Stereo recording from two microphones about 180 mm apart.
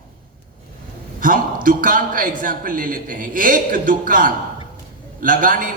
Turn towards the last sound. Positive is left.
turn(degrees=-50)  # may be behind; listen again after turning